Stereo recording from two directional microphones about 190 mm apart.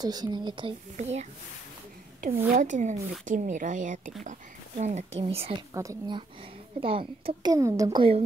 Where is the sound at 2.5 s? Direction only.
40° right (ahead or behind).